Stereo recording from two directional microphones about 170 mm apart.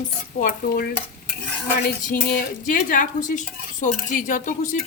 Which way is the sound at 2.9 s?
50° left (ahead or behind).